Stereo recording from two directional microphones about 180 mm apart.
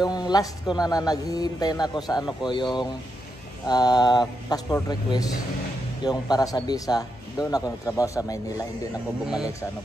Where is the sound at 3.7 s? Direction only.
20° left (ahead or behind).